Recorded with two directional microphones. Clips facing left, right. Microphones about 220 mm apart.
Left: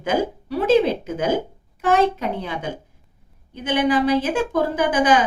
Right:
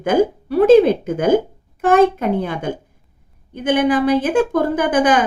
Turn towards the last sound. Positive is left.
turn(degrees=-55)  # may be behind; listen again after turning